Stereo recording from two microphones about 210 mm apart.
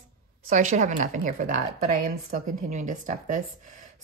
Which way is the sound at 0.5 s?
35° right (ahead or behind).